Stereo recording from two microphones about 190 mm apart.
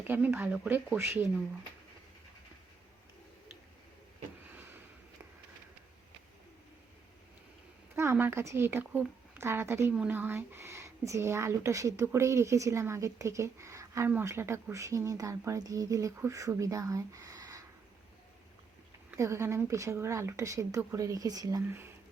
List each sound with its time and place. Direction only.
0.1 s speech: 10° right (ahead or behind)
7.9 s speech: 10° right (ahead or behind)
19.1 s speech: 15° right (ahead or behind)